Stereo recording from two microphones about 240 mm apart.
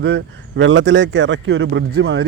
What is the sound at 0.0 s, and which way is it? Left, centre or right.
Speech, right.